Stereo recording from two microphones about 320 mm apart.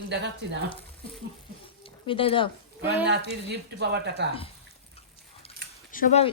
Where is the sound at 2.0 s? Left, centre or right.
Centre.